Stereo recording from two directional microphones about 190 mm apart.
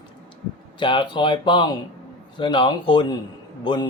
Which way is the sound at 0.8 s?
25° left (ahead or behind).